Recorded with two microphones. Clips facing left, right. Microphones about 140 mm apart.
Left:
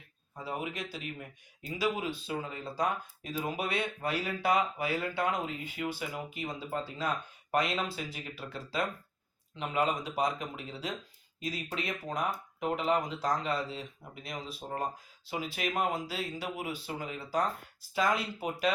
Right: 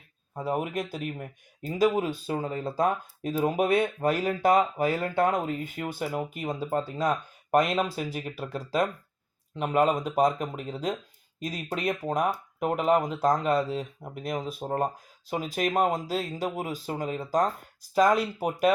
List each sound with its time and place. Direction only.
0.3 s speech: 50° right (ahead or behind)